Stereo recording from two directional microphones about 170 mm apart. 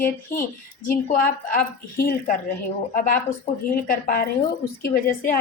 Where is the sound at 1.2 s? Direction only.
60° left (ahead or behind).